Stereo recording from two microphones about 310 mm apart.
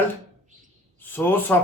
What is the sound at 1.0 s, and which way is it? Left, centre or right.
Speech, centre.